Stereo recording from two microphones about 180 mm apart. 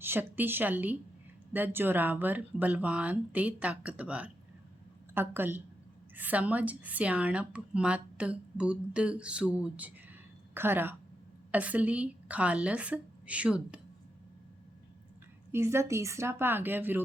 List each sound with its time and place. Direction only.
0.0 s speech: 10° right (ahead or behind)
15.5 s speech: 15° right (ahead or behind)